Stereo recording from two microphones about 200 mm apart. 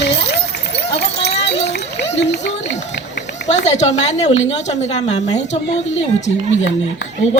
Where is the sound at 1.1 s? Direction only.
60° left (ahead or behind).